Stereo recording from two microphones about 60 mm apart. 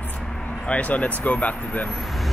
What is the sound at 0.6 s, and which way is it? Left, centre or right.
Speech, left.